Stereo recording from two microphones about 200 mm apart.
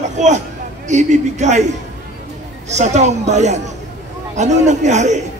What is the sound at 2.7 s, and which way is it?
A man's voice, 35° right (ahead or behind).